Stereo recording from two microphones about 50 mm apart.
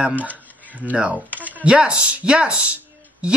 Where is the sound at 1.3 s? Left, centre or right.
Right.